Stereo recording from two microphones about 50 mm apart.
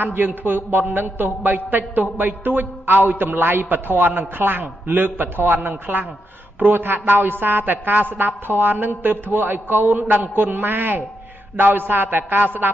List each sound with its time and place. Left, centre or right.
0.0 s a man's voice: right